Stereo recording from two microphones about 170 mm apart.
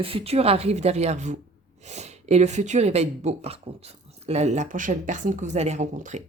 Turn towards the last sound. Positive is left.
turn(degrees=-45)  # may be behind; listen again after turning